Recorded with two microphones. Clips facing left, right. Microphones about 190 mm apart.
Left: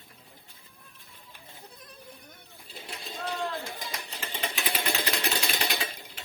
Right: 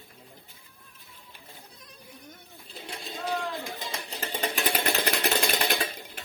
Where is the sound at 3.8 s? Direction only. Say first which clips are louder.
Right 3 dB; 25° right (ahead or behind).